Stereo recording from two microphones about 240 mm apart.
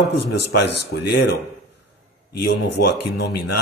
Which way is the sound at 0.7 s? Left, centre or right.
Left.